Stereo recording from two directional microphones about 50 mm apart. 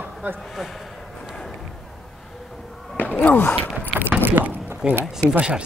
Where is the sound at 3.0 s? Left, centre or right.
Left.